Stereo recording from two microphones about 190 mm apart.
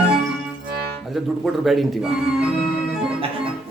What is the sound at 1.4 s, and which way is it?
A man's voice, centre (ahead or behind).